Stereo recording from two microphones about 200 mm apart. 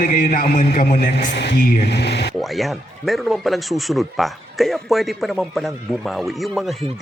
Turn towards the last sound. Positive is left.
turn(degrees=0)  # may be behind; listen again after turning